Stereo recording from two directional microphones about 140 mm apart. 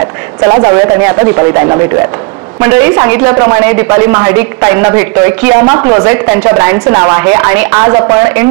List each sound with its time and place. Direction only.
0.4 s a woman's voice: 15° right (ahead or behind)